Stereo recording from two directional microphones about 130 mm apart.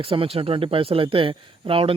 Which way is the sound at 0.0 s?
45° right (ahead or behind).